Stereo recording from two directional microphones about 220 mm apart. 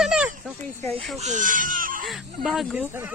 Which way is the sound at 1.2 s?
35° right (ahead or behind).